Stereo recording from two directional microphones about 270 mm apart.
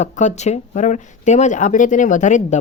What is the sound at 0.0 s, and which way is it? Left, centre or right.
Speech, left.